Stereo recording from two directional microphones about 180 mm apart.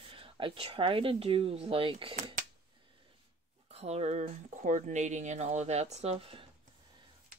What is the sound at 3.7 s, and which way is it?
Speech, 35° right (ahead or behind).